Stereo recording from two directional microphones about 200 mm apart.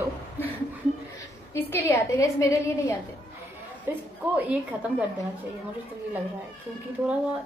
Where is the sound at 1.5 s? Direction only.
10° left (ahead or behind).